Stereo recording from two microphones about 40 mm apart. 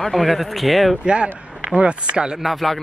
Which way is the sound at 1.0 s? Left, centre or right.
Right.